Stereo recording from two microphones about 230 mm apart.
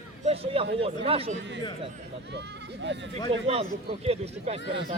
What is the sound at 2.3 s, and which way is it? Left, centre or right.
Speech, right.